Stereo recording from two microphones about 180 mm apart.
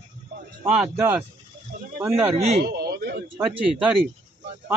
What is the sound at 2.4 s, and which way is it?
Speech, 35° right (ahead or behind).